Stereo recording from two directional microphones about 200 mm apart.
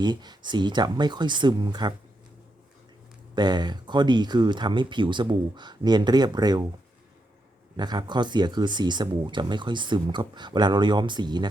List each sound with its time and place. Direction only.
0.0 s speech: 20° right (ahead or behind)
3.3 s speech: 20° right (ahead or behind)
7.8 s speech: 20° right (ahead or behind)